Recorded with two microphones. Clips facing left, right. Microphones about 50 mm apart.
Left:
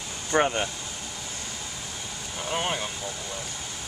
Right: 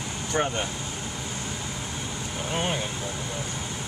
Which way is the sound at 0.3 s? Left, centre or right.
Left.